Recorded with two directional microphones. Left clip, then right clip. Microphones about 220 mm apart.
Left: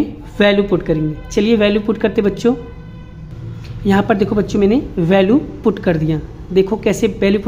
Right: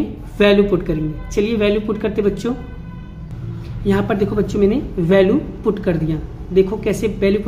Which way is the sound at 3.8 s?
25° left (ahead or behind).